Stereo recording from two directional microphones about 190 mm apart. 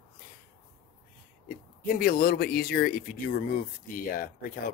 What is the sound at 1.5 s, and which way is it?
Speech, 50° left (ahead or behind).